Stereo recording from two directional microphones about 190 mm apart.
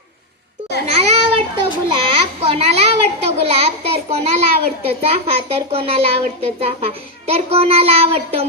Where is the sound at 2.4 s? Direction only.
30° right (ahead or behind).